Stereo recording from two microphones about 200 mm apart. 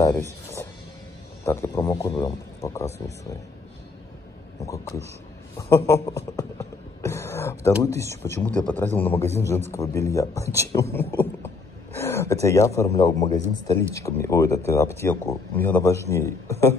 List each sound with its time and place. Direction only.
0.0 s music: 15° left (ahead or behind)
1.4 s speech: 10° left (ahead or behind)
5.6 s speech: 15° left (ahead or behind)
7.0 s throat clearing: 15° left (ahead or behind)
7.8 s a man's voice: 15° left (ahead or behind)